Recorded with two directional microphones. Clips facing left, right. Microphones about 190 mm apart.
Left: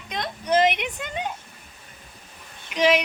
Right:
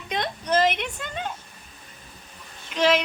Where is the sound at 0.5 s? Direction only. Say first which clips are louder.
Left 2 dB; 15° left (ahead or behind).